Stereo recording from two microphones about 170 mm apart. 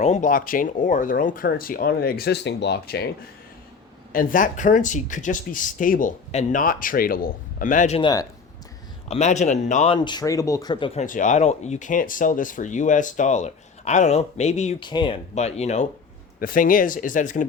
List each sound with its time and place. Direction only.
0.0 s speech: 45° left (ahead or behind); by 3.1 s 70° left (ahead or behind)
4.1 s speech: 55° left (ahead or behind)
9.0 s speech: 40° left (ahead or behind)
9.9 s speech: 25° left (ahead or behind)
11.0 s speech: 50° left (ahead or behind)
14.8 s speech: 25° left (ahead or behind)
15.4 s speech: 40° left (ahead or behind)
16.4 s speech: 55° left (ahead or behind)